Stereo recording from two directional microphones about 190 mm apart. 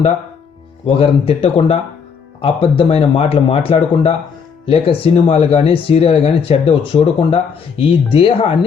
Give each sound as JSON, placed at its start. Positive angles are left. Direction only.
{"t": 0.9, "sound": "speech", "side_deg": 30}